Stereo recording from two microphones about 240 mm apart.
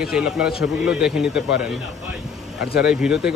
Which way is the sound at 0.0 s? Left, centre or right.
Centre.